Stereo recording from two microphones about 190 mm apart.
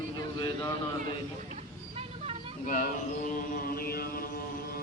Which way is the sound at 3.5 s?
50° left (ahead or behind).